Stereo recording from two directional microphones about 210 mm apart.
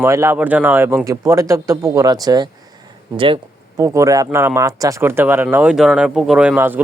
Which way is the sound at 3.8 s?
15° right (ahead or behind).